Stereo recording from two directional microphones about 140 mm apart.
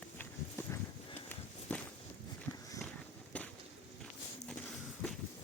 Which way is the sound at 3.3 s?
10° left (ahead or behind).